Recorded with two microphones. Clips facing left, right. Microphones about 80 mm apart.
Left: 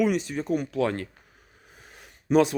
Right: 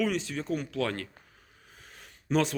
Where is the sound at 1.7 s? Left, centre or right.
Centre.